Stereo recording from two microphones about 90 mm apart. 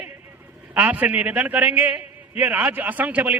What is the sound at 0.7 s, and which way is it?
A man's voice, 15° right (ahead or behind).